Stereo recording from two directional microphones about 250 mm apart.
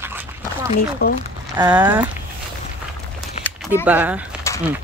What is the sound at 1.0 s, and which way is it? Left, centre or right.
Speech, left.